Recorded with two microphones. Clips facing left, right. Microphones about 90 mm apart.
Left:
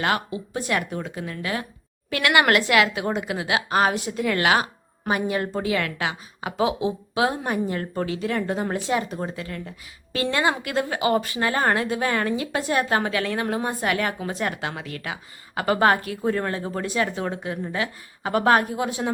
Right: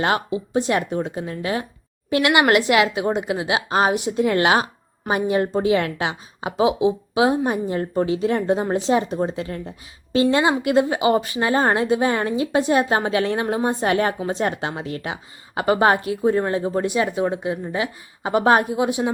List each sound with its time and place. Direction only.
0.0 s a woman's voice: 25° right (ahead or behind)